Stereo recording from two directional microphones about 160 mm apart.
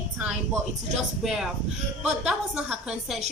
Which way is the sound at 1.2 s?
Centre (ahead or behind).